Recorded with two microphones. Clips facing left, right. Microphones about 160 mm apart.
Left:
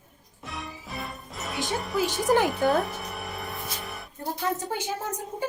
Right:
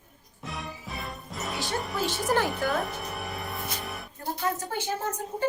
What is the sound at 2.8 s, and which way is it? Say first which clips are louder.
Music: left 1 dB; centre (ahead or behind).